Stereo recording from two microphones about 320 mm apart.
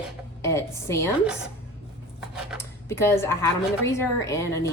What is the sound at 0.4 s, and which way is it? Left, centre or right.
Speech, centre.